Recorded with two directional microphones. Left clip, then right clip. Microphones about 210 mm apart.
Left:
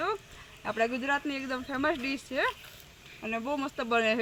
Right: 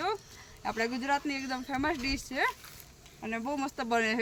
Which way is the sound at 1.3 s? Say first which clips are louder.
Even; 30° right (ahead or behind).